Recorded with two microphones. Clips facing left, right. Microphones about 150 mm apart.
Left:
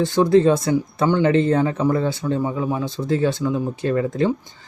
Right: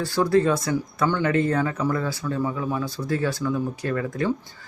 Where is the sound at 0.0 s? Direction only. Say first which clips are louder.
Left 5 dB; 20° left (ahead or behind).